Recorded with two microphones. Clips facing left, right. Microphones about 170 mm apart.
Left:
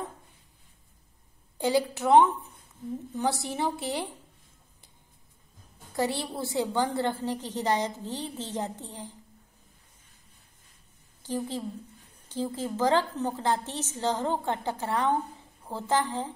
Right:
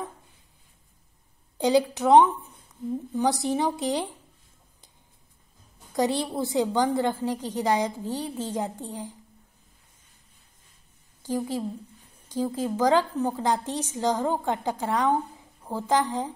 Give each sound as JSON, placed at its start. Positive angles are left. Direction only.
{"t": 1.6, "sound": "a woman's voice", "side_deg": -20}
{"t": 5.9, "sound": "a woman's voice", "side_deg": -20}
{"t": 11.2, "sound": "a woman's voice", "side_deg": -10}